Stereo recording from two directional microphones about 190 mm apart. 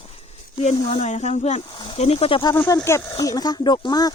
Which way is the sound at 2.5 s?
10° left (ahead or behind).